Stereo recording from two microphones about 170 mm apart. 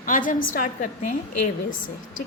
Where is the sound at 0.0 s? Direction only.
50° left (ahead or behind).